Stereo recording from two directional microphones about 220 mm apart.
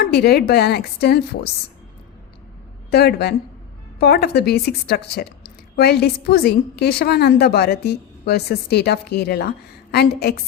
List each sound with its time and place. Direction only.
0.0 s a woman's voice: 45° left (ahead or behind)
2.9 s a woman's voice: 45° left (ahead or behind)